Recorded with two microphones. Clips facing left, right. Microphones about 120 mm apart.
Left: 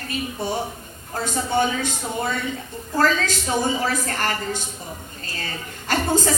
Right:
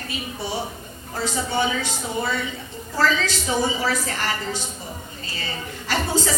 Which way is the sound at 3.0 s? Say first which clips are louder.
Left 1 dB; 50° left (ahead or behind).